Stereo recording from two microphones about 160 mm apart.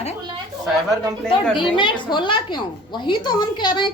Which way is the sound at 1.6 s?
30° left (ahead or behind).